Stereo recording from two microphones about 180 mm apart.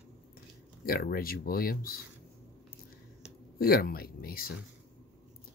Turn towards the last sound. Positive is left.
turn(degrees=55)  # may be behind; listen again after turning